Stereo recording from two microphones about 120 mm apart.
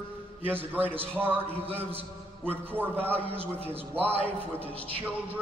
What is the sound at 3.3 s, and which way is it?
Speech, 55° right (ahead or behind).